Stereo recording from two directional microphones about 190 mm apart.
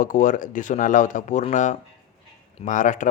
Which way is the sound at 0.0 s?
45° left (ahead or behind).